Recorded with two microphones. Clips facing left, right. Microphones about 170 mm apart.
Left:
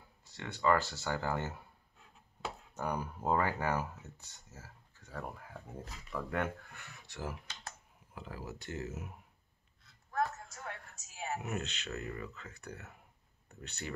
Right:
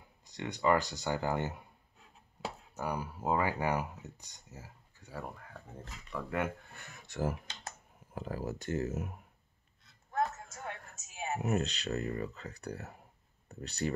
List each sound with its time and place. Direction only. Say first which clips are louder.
0.2 s speech: right 2 dB; 15° right (ahead or behind)
2.7 s speech: even; 5° right (ahead or behind)
5.2 s speech: even; 5° left (ahead or behind)
6.7 s speech: right 3 dB; 45° right (ahead or behind)
10.1 s a sound: right 1 dB; 20° right (ahead or behind)
11.4 s speech: right 7 dB; 35° right (ahead or behind)